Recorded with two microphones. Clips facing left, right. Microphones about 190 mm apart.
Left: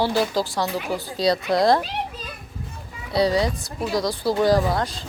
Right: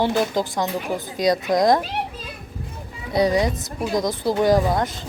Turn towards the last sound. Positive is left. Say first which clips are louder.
# right 1 dB
turn(degrees=-20)  # may be behind; listen again after turning